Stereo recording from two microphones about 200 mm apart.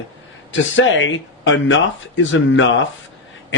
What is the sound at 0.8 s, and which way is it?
Speech, 70° left (ahead or behind).